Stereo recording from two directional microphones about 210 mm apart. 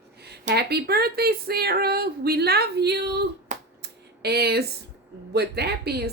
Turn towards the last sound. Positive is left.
turn(degrees=-50)  # may be behind; listen again after turning